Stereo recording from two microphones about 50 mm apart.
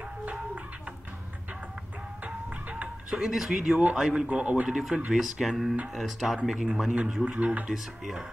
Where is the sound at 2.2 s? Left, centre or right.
Right.